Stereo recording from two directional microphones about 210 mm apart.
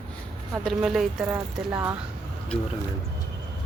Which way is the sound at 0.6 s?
Centre (ahead or behind).